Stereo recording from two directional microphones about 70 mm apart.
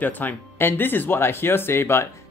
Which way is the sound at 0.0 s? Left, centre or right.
Left.